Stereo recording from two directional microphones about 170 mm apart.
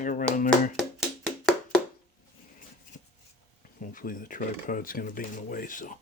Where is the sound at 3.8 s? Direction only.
50° left (ahead or behind).